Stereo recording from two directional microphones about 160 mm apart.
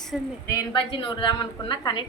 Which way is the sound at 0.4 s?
30° left (ahead or behind).